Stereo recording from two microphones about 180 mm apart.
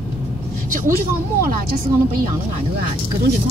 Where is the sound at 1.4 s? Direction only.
55° right (ahead or behind).